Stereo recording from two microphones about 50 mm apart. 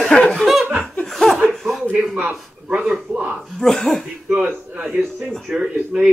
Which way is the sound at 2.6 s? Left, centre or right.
Right.